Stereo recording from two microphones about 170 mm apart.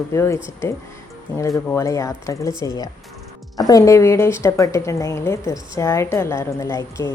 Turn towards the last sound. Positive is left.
turn(degrees=20)  # may be behind; listen again after turning